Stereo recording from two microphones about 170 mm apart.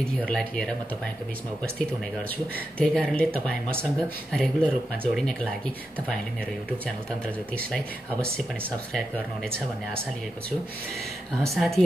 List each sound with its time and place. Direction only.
0.2 s speech: 5° left (ahead or behind)
2.8 s speech: 5° left (ahead or behind)
7.5 s speech: 5° left (ahead or behind)
11.5 s speech: centre (ahead or behind)